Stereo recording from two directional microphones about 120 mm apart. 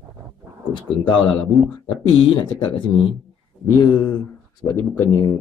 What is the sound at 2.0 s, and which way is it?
Speech, 40° left (ahead or behind).